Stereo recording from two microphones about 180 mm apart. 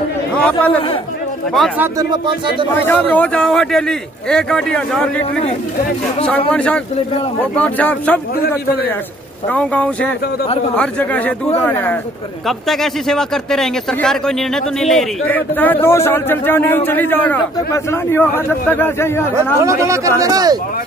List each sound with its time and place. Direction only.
0.4 s speech: 10° left (ahead or behind)
1.8 s speech: 20° right (ahead or behind)
2.7 s a man's voice: 10° left (ahead or behind)
6.5 s a man's voice: 5° left (ahead or behind)
9.5 s speech: 10° left (ahead or behind)
19.3 s speech: 15° right (ahead or behind)